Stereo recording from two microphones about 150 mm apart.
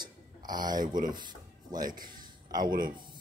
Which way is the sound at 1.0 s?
30° right (ahead or behind).